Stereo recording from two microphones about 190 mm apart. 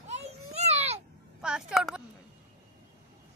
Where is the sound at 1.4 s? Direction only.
5° right (ahead or behind).